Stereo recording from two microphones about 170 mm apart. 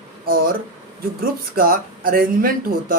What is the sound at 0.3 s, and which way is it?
Speech, 60° right (ahead or behind).